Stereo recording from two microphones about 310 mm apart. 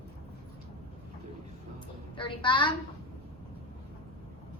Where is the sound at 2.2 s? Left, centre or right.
Centre.